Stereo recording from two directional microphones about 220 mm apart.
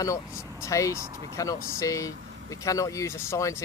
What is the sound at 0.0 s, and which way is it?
Speech, 15° left (ahead or behind).